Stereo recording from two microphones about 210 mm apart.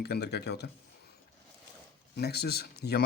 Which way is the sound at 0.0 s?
50° left (ahead or behind).